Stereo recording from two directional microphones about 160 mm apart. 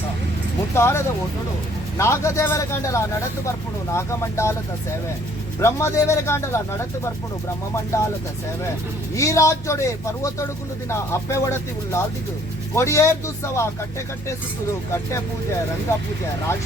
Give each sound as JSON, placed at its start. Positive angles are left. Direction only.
{"t": 0.8, "sound": "speech", "side_deg": 15}
{"t": 5.5, "sound": "speech", "side_deg": 15}
{"t": 9.1, "sound": "speech", "side_deg": 20}